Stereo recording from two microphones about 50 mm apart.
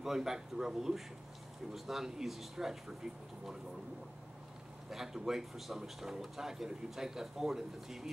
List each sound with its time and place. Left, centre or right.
0.0 s speech: centre
4.9 s speech: centre